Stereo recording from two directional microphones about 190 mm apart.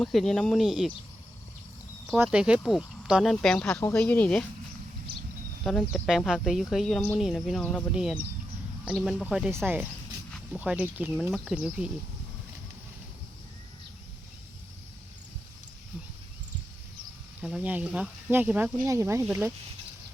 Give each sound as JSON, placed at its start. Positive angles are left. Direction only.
{"t": 0.0, "sound": "speech", "side_deg": 0}
{"t": 2.1, "sound": "speech", "side_deg": -5}
{"t": 5.6, "sound": "speech", "side_deg": 0}
{"t": 10.6, "sound": "speech", "side_deg": -10}
{"t": 17.4, "sound": "speech", "side_deg": -5}